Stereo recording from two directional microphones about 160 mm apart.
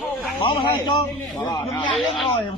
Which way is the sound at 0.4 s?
30° left (ahead or behind).